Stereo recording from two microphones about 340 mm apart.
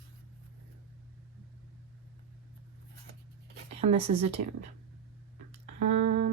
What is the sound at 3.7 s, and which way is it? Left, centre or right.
Speech, centre.